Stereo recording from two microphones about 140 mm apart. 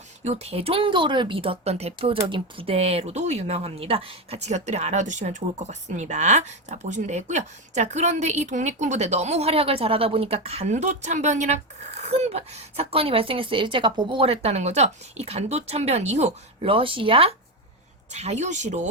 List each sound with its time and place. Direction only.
0.3 s speech: 50° right (ahead or behind)
18.1 s speech: 55° right (ahead or behind)